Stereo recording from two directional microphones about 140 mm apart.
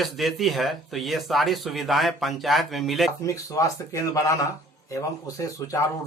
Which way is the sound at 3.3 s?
25° left (ahead or behind).